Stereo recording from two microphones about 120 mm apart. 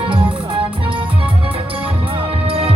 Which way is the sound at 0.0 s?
45° right (ahead or behind).